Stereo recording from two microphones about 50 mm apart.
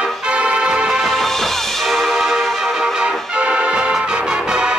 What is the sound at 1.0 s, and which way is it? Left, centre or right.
Music, centre.